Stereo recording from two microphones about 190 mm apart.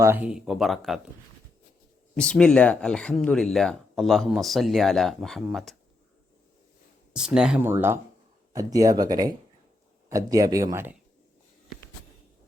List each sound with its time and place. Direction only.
0.0 s speech: 10° right (ahead or behind)
2.1 s speech: 5° left (ahead or behind)
7.1 s speech: 5° right (ahead or behind)